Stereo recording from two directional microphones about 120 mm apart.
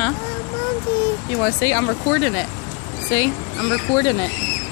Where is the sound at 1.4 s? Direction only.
15° left (ahead or behind).